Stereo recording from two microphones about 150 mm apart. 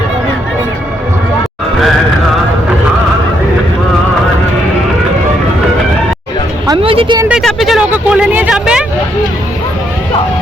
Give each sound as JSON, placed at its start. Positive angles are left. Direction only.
{"t": 6.8, "sound": "a woman's voice", "side_deg": -35}
{"t": 7.3, "sound": "speech", "side_deg": 0}